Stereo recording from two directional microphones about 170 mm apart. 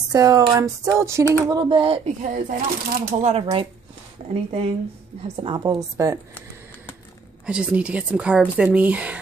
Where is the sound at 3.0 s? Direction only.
45° right (ahead or behind).